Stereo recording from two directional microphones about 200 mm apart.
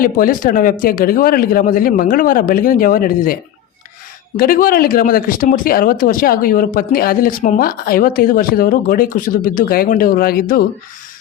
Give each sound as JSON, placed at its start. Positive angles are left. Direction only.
{"t": 0.0, "sound": "speech", "side_deg": 45}
{"t": 4.4, "sound": "speech", "side_deg": 45}